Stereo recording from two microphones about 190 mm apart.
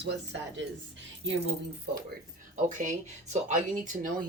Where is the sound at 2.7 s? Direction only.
40° right (ahead or behind).